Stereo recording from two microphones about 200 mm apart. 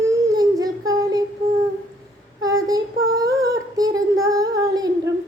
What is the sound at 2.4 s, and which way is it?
Child singing, 20° right (ahead or behind).